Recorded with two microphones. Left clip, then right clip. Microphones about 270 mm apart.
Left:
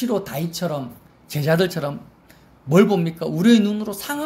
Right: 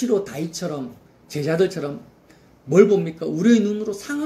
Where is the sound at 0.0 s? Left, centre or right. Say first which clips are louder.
Right 2 dB; left.